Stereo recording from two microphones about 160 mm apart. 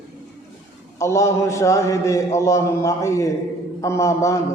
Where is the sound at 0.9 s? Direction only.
20° left (ahead or behind).